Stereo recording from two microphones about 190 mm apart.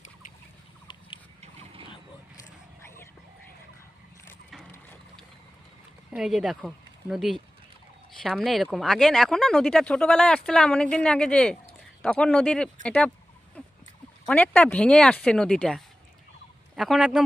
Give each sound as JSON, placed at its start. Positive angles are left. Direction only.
{"t": 6.1, "sound": "speech", "side_deg": 0}
{"t": 13.6, "sound": "a sound", "side_deg": 5}
{"t": 14.3, "sound": "speech", "side_deg": 10}